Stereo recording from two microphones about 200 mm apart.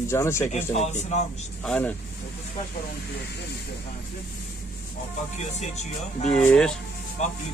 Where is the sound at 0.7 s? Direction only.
35° left (ahead or behind).